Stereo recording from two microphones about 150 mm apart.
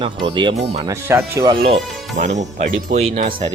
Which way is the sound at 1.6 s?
50° right (ahead or behind).